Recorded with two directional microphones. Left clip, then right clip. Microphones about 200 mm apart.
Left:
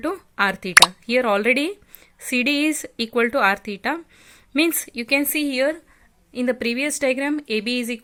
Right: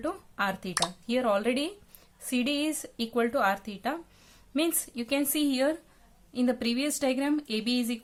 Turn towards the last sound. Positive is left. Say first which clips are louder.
# left 7 dB
turn(degrees=30)  # may be behind; listen again after turning